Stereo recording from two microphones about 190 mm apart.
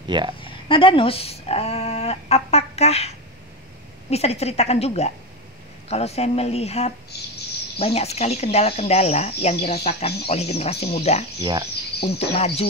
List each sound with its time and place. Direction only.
0.1 s speech: 25° right (ahead or behind)
0.4 s a sound: 25° left (ahead or behind)
4.1 s speech: 35° left (ahead or behind)
7.1 s bird: 60° left (ahead or behind)
7.8 s speech: 35° left (ahead or behind)